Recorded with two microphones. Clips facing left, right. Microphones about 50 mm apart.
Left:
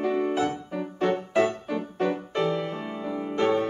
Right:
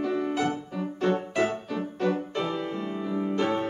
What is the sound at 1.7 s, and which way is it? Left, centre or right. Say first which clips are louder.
Music: left 1 dB; centre.